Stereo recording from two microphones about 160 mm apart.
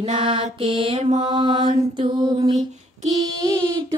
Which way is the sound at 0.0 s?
40° right (ahead or behind).